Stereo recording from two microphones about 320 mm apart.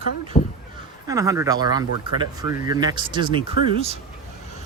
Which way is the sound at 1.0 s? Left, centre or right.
Centre.